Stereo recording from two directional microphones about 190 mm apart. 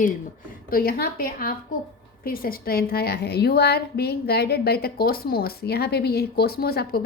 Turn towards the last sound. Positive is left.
turn(degrees=55)  # may be behind; listen again after turning